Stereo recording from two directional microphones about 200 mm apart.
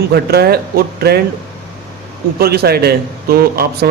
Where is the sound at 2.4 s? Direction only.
50° right (ahead or behind).